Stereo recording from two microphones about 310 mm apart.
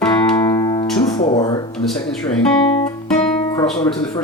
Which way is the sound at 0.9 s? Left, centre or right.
Centre.